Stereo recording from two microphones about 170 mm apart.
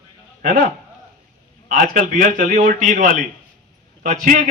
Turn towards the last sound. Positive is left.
turn(degrees=-45)  # may be behind; listen again after turning